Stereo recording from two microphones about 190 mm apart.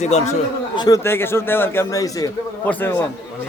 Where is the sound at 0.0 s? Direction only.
35° left (ahead or behind).